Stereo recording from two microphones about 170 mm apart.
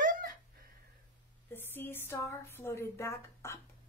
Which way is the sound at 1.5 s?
10° left (ahead or behind).